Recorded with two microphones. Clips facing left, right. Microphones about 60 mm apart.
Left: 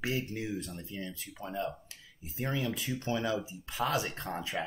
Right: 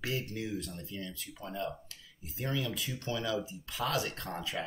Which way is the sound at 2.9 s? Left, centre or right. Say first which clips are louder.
Left 3 dB; left.